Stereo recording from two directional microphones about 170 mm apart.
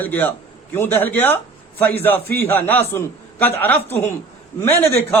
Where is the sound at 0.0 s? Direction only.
10° left (ahead or behind).